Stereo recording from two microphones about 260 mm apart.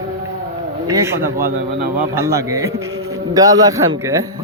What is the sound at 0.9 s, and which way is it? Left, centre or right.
A man's voice, centre.